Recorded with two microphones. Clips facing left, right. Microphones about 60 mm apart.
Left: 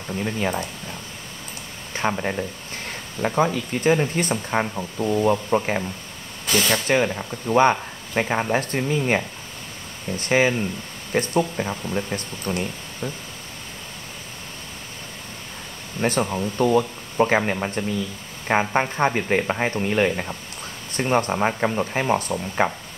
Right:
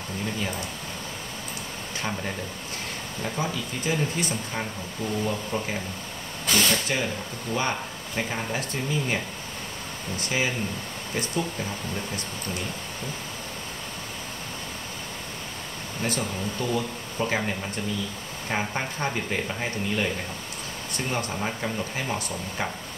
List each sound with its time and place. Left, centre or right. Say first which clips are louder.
0.2 s speech: left 6 dB; left
2.0 s speech: left 8 dB; left
3.2 s speech: left 9 dB; left
6.7 s speech: left 6 dB; left
11.1 s speech: left 8 dB; left
16.0 s speech: left 7 dB; left